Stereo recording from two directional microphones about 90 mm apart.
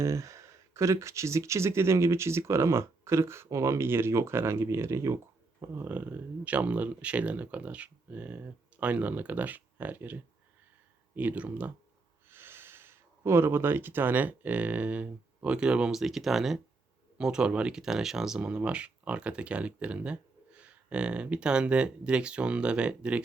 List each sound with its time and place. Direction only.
0.0 s speech: 35° right (ahead or behind); by 23.2 s 10° right (ahead or behind)